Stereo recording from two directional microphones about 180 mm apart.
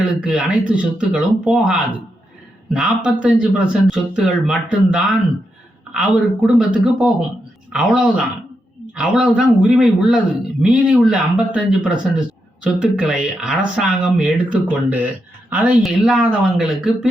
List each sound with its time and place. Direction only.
0.0 s speech: 5° right (ahead or behind)